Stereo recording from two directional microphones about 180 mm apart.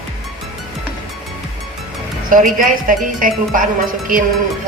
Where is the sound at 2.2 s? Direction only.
50° right (ahead or behind).